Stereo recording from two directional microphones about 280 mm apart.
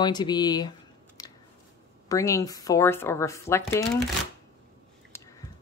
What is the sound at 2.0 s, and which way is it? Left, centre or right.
A woman's voice, centre.